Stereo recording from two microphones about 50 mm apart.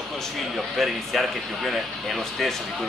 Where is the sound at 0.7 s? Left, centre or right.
Centre.